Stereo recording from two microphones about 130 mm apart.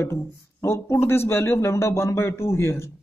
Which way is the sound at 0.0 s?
20° left (ahead or behind).